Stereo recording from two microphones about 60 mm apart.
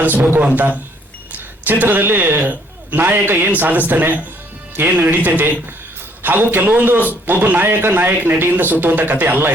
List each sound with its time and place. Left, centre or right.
0.0 s a man's voice: right